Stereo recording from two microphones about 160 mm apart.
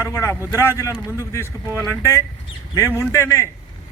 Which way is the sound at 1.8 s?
20° left (ahead or behind).